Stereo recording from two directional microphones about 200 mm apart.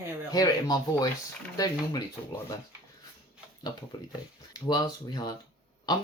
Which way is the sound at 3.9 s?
20° left (ahead or behind).